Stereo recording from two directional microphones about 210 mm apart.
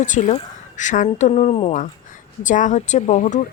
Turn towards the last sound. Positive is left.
turn(degrees=35)  # may be behind; listen again after turning